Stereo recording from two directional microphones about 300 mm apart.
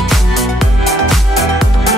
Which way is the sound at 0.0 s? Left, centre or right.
Centre.